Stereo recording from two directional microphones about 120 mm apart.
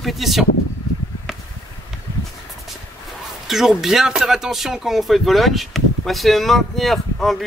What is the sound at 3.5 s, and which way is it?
Speech, 5° right (ahead or behind).